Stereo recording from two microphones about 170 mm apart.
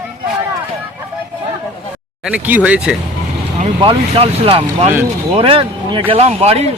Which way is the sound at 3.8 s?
30° right (ahead or behind).